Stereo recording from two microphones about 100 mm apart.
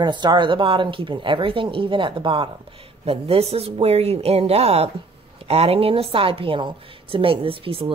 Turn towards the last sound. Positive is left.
turn(degrees=-65)  # may be behind; listen again after turning